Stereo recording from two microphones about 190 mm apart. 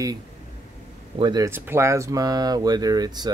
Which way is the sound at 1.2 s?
20° right (ahead or behind).